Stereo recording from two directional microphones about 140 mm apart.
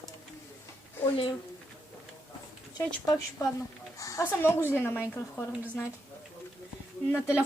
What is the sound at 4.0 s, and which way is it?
Speech, 25° left (ahead or behind).